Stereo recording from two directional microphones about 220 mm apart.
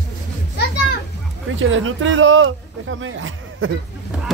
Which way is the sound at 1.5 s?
60° right (ahead or behind).